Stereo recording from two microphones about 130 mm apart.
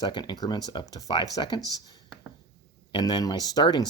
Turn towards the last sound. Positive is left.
turn(degrees=30)  # may be behind; listen again after turning